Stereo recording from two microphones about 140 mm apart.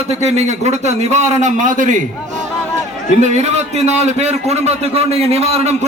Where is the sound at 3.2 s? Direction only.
55° right (ahead or behind).